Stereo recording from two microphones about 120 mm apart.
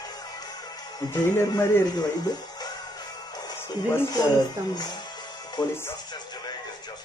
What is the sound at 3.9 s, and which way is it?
Speech, 20° left (ahead or behind).